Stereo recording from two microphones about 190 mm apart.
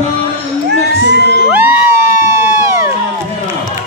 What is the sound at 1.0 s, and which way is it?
Children shouting, 60° left (ahead or behind).